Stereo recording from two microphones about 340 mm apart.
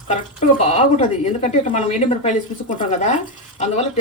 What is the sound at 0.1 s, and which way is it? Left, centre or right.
Speech, centre.